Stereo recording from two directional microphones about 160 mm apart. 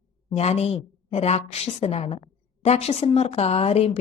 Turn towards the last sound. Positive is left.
turn(degrees=40)  # may be behind; listen again after turning